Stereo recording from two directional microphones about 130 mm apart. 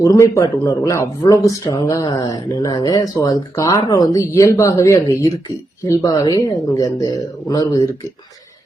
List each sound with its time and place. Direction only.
0.0 s speech: 25° left (ahead or behind)